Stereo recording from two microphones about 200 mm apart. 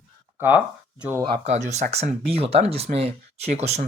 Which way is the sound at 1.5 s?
35° right (ahead or behind).